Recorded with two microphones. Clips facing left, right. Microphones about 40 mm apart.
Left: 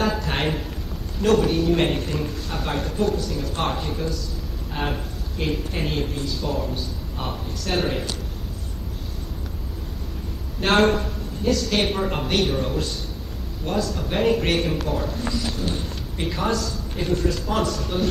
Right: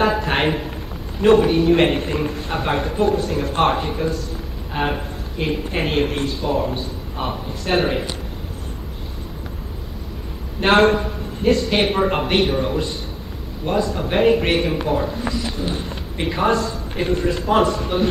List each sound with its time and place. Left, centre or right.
0.0 s a sound: right
0.5 s a man's voice: right
3.7 s a man's voice: right
5.7 s speech: right
6.3 s speech: right
10.6 s a man's voice: centre
11.4 s speech: right